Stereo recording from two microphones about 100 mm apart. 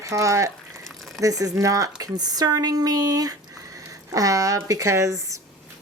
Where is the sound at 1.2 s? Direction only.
35° right (ahead or behind).